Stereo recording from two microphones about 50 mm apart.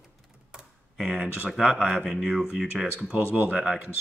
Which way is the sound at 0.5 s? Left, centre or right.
Centre.